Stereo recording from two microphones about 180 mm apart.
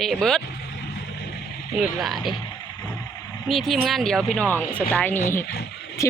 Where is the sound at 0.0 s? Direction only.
5° left (ahead or behind).